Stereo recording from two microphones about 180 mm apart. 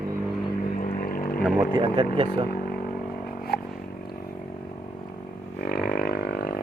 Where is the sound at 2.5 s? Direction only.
55° left (ahead or behind).